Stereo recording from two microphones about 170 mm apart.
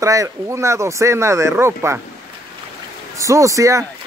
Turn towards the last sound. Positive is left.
turn(degrees=-20)  # may be behind; listen again after turning